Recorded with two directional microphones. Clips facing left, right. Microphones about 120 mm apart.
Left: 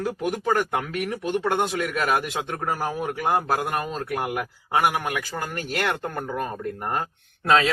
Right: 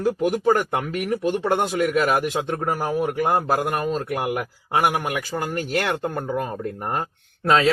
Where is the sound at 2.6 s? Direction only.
20° right (ahead or behind).